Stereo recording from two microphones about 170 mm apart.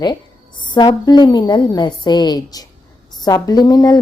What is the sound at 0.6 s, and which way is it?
A woman's voice, 25° left (ahead or behind).